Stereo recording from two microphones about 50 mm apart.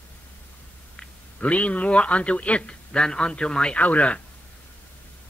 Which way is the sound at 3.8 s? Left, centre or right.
Left.